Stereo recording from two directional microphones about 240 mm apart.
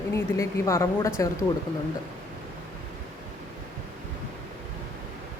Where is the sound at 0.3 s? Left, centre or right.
Centre.